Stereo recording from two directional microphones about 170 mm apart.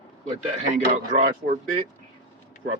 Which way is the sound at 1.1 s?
45° right (ahead or behind).